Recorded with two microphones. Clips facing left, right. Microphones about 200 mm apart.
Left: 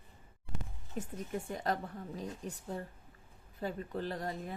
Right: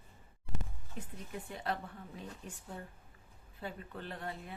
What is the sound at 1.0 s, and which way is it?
A woman's voice, 45° left (ahead or behind).